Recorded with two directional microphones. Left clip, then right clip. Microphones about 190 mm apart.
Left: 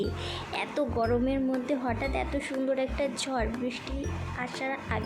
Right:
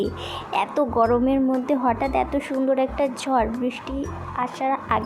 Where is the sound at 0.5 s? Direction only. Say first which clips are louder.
Right 9 dB; 15° right (ahead or behind).